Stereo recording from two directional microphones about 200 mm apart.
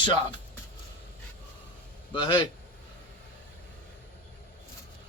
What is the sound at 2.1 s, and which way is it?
Speech, 25° left (ahead or behind).